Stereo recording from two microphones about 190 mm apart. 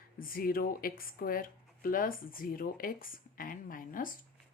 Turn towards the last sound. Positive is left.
turn(degrees=45)  # may be behind; listen again after turning